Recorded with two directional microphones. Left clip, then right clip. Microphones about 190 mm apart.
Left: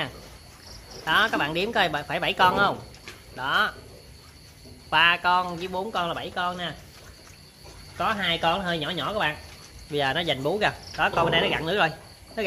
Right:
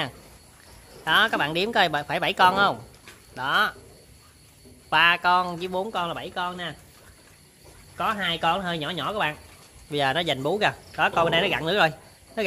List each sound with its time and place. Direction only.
1.0 s speech: 55° right (ahead or behind)
4.8 s speech: 50° right (ahead or behind)
8.0 s speech: 50° right (ahead or behind)